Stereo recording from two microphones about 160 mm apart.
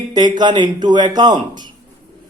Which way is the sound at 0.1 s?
25° right (ahead or behind).